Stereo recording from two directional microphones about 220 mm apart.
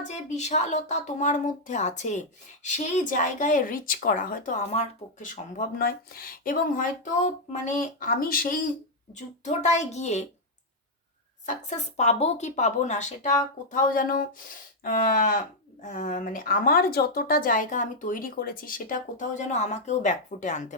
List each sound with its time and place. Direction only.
0.1 s speech: 30° left (ahead or behind)
11.4 s speech: 30° left (ahead or behind)